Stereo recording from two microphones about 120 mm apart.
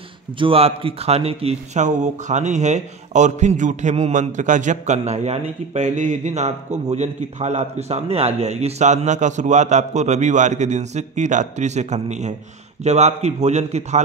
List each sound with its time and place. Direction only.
0.4 s a man's voice: 50° right (ahead or behind)